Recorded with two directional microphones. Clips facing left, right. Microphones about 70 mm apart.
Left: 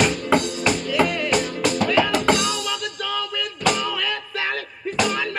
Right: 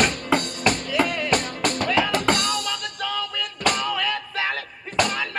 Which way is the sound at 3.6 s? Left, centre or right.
Right.